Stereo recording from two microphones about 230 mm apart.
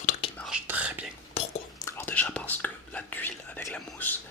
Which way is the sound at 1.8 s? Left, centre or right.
Centre.